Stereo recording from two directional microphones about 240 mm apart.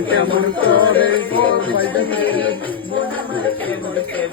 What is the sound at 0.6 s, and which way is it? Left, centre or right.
Music, centre.